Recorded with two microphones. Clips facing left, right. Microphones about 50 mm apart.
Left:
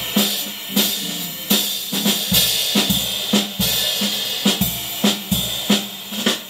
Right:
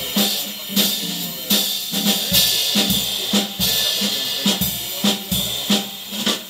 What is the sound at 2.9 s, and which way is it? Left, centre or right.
Drum kit, left.